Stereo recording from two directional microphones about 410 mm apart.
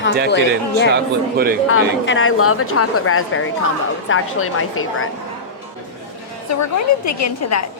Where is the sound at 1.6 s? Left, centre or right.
Left.